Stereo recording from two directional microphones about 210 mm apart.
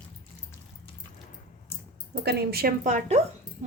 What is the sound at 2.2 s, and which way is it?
Speech, 45° right (ahead or behind).